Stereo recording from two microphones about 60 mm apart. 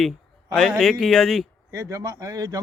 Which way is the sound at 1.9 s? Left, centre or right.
Right.